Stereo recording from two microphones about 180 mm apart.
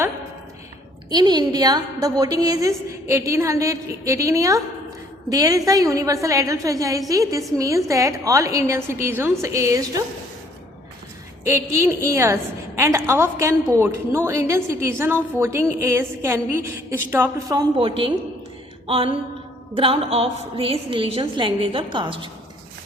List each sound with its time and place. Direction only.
1.1 s a woman's voice: 25° right (ahead or behind)
11.4 s a woman's voice: 15° right (ahead or behind)
17.5 s a woman's voice: 25° right (ahead or behind)
18.9 s a sound: 30° right (ahead or behind)
19.7 s a woman's voice: 30° right (ahead or behind)